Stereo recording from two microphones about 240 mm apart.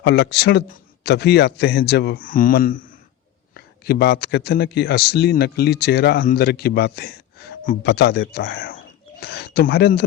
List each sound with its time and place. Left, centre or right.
0.0 s a man's voice: left